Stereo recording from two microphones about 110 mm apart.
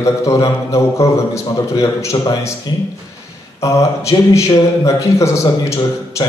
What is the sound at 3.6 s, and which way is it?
A man's voice, 30° left (ahead or behind).